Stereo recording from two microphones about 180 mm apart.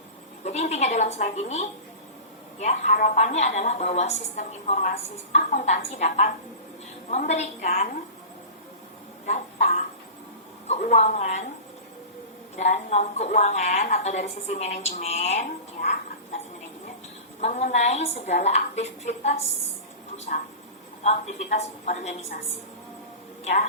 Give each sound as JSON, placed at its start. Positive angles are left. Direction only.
{"t": 0.4, "sound": "a woman's voice", "side_deg": 35}
{"t": 9.2, "sound": "a sound", "side_deg": 40}
{"t": 10.7, "sound": "a woman's voice", "side_deg": 40}
{"t": 12.5, "sound": "a woman's voice", "side_deg": 40}
{"t": 17.4, "sound": "a woman's voice", "side_deg": 40}
{"t": 23.4, "sound": "a woman's voice", "side_deg": 40}